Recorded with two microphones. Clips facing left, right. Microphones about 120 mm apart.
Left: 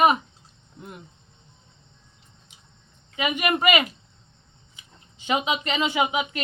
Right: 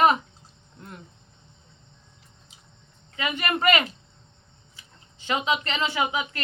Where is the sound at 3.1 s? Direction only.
15° left (ahead or behind).